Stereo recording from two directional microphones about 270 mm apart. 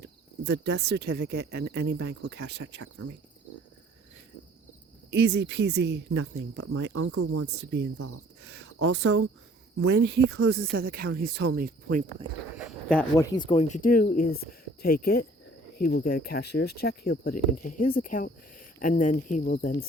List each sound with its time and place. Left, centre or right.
0.0 s speech: right
5.1 s speech: right
7.6 s speech: right
12.5 s speech: centre; by 19.8 s left